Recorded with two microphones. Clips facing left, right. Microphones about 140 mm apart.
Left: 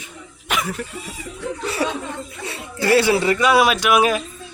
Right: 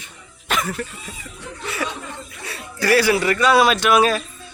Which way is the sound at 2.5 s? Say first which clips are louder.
Left 1 dB; 25° left (ahead or behind).